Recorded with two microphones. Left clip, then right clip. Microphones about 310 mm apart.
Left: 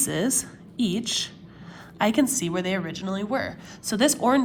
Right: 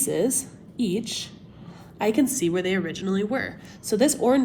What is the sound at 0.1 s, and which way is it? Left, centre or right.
A woman's voice, left.